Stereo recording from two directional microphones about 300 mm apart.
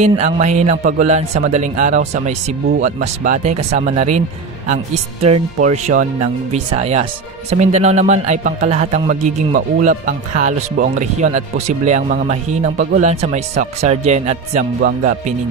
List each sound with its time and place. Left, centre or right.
0.0 s speech: right
5.2 s speech: right